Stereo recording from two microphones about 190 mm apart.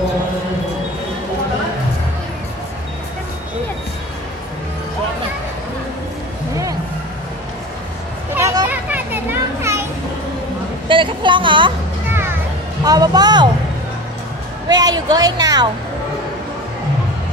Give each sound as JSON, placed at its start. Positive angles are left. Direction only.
{"t": 8.4, "sound": "children playing", "side_deg": -15}
{"t": 10.9, "sound": "a sound", "side_deg": -25}
{"t": 12.1, "sound": "music", "side_deg": -10}
{"t": 12.8, "sound": "speech", "side_deg": -20}
{"t": 14.7, "sound": "a woman's voice", "side_deg": -20}